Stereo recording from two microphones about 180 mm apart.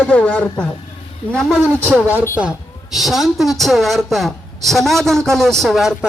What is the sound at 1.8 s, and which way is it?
A man's voice, 10° right (ahead or behind).